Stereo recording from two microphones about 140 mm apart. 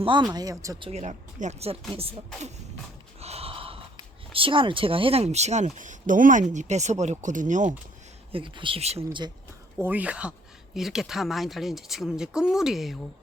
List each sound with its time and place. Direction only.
0.0 s speech: 35° right (ahead or behind)
0.8 s speech: 50° right (ahead or behind)
8.3 s speech: 35° right (ahead or behind)
9.8 s speech: 10° right (ahead or behind)